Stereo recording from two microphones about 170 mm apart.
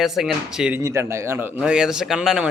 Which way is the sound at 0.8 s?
15° right (ahead or behind).